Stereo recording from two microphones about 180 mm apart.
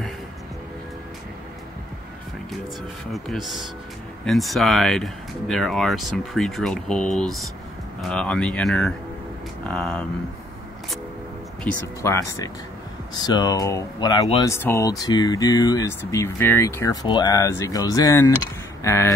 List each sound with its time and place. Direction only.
3.1 s speech: centre (ahead or behind)
11.6 s speech: 15° left (ahead or behind)